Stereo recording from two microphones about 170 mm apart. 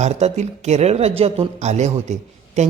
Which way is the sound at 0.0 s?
40° right (ahead or behind).